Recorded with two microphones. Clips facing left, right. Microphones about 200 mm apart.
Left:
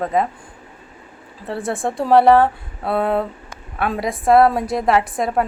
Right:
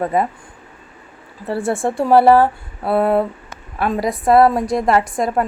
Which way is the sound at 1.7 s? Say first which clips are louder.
Right 2 dB; centre (ahead or behind).